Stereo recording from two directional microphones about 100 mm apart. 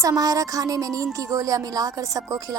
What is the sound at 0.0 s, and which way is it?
Speech, 35° right (ahead or behind).